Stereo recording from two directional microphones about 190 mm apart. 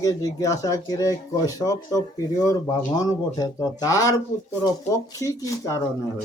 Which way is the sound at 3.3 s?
20° left (ahead or behind).